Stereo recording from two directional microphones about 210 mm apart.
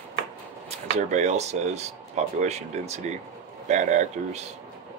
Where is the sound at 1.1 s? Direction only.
35° right (ahead or behind).